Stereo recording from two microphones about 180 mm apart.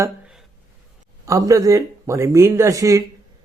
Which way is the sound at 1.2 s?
20° right (ahead or behind).